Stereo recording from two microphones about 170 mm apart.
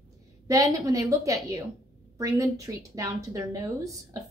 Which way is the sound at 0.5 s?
20° right (ahead or behind).